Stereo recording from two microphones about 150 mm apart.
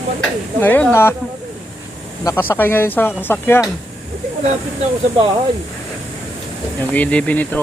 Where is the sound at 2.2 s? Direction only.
15° left (ahead or behind).